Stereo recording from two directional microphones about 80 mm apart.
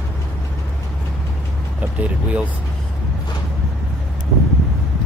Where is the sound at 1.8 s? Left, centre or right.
Centre.